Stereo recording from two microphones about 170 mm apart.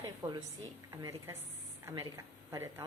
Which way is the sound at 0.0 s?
20° right (ahead or behind).